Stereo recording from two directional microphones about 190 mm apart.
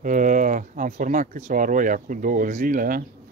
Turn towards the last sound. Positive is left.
turn(degrees=-45)  # may be behind; listen again after turning